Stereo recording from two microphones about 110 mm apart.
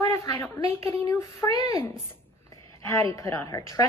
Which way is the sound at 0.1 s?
30° left (ahead or behind).